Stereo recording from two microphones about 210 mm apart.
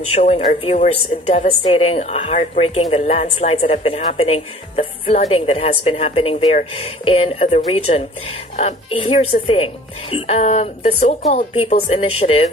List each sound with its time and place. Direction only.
0.1 s speech: 30° left (ahead or behind)